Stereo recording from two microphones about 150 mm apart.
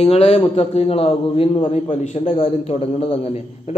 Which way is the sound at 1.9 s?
50° left (ahead or behind).